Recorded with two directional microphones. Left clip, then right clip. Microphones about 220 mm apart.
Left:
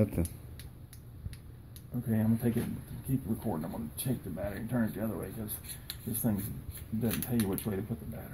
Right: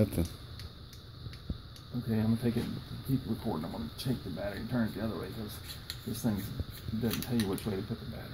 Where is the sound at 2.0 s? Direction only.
25° left (ahead or behind).